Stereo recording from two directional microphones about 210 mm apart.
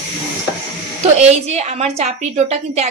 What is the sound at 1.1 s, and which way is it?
A woman's voice, 30° right (ahead or behind).